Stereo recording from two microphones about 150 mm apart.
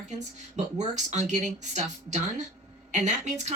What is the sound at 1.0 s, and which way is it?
Speech, 50° right (ahead or behind).